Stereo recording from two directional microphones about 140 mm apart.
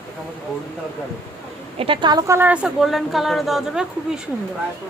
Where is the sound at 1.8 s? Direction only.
35° right (ahead or behind).